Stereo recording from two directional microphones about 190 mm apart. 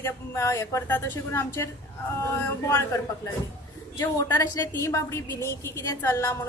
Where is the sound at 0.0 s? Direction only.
15° left (ahead or behind).